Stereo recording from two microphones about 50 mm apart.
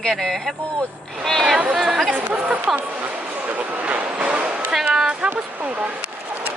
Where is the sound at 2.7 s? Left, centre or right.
Centre.